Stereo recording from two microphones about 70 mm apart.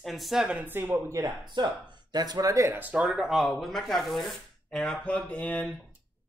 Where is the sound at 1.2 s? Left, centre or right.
Right.